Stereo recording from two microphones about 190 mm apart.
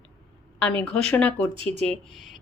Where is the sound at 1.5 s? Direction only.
30° right (ahead or behind).